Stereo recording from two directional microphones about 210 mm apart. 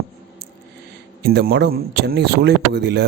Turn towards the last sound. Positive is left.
turn(degrees=-55)  # may be behind; listen again after turning